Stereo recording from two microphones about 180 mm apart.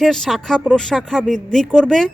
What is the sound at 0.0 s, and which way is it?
A woman's voice, centre (ahead or behind).